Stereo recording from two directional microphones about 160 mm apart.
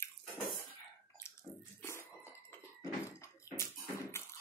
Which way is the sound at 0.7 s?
15° left (ahead or behind).